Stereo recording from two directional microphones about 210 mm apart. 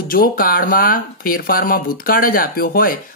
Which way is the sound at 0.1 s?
45° left (ahead or behind).